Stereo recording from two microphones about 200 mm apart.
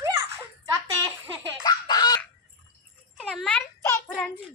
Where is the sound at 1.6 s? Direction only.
20° left (ahead or behind).